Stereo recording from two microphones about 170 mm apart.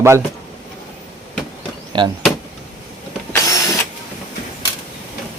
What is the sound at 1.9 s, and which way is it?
Speech, 30° right (ahead or behind).